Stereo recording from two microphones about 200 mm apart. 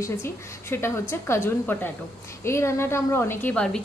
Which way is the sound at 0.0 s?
15° left (ahead or behind).